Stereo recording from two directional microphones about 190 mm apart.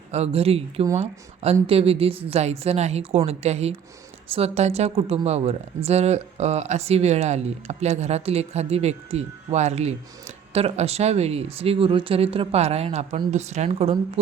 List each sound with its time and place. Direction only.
0.1 s speech: 35° right (ahead or behind)